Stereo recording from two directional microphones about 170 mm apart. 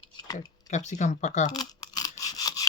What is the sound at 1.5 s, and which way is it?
Toothbrush, 25° left (ahead or behind).